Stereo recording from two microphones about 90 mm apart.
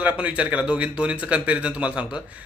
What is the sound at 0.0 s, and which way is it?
A man's voice, 15° right (ahead or behind).